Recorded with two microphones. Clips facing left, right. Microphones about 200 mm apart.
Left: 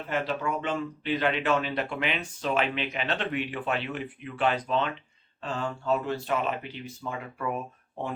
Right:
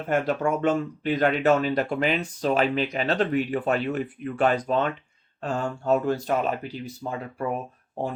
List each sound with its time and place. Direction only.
0.1 s speech: 50° right (ahead or behind)